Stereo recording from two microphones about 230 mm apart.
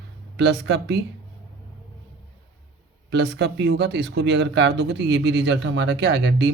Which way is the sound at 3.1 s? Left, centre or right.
Right.